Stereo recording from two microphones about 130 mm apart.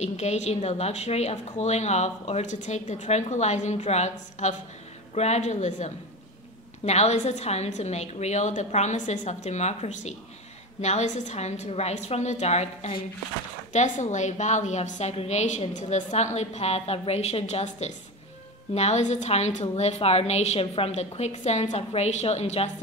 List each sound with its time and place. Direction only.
0.0 s a woman's voice: 60° left (ahead or behind)